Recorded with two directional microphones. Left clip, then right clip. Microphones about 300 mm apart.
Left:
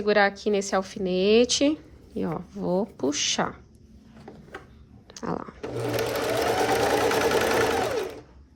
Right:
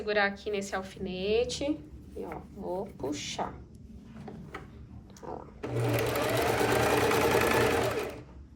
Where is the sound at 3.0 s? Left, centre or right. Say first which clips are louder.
Left 9 dB; left.